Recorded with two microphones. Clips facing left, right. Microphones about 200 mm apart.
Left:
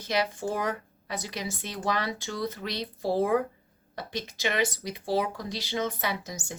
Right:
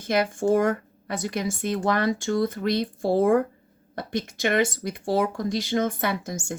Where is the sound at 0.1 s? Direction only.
50° right (ahead or behind).